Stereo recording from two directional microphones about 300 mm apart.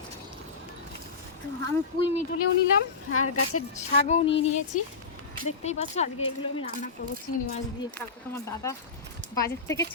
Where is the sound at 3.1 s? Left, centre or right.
Left.